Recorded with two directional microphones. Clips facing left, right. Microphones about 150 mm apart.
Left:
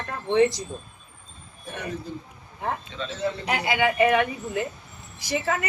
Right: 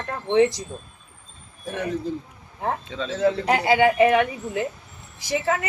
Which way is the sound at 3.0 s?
90° right.